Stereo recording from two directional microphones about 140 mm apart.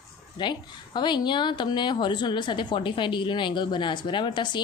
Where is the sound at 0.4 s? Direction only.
30° left (ahead or behind).